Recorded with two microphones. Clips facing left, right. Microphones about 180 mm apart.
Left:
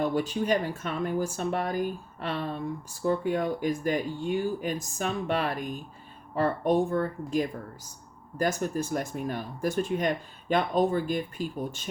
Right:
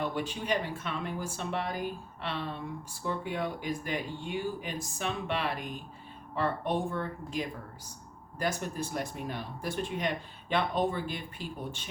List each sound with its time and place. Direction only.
0.0 s speech: 40° left (ahead or behind)